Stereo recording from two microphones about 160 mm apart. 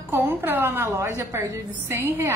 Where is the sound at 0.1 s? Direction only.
15° right (ahead or behind).